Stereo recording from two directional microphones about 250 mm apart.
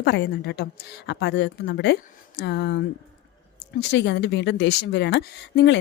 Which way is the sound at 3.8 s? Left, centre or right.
Left.